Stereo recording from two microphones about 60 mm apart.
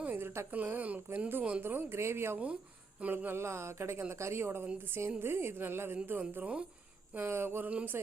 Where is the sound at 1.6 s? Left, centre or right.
Right.